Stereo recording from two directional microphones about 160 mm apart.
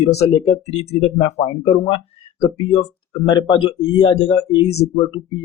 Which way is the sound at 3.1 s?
25° left (ahead or behind).